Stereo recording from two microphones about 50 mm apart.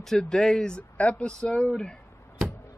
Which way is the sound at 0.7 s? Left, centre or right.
Left.